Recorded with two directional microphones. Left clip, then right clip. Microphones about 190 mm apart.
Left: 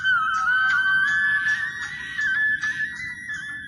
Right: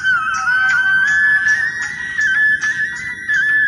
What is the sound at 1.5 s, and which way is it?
Music, 30° right (ahead or behind).